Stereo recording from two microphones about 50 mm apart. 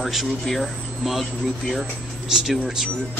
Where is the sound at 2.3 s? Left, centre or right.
Centre.